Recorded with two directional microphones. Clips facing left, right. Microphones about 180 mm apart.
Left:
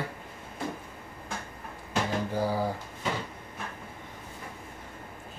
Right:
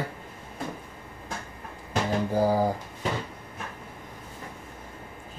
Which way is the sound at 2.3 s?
45° right (ahead or behind).